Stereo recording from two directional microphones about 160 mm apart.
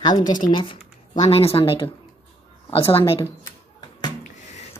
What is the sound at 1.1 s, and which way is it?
Speech, 40° left (ahead or behind).